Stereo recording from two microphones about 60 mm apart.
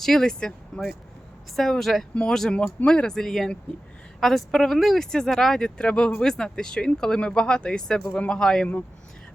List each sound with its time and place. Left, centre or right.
0.0 s a woman's voice: centre